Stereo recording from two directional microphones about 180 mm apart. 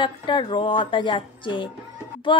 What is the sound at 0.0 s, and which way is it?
Speech, 25° left (ahead or behind).